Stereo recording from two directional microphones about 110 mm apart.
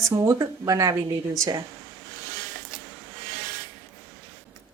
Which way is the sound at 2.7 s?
5° right (ahead or behind).